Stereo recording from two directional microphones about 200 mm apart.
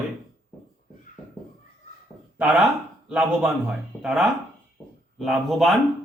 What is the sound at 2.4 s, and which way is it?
A man's voice, 5° right (ahead or behind).